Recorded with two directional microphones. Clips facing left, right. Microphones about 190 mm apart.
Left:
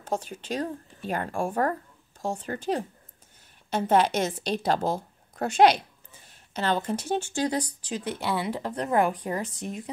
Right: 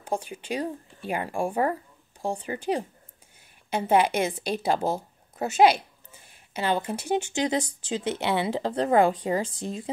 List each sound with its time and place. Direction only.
0.0 s a woman's voice: 10° right (ahead or behind); by 9.8 s 30° right (ahead or behind)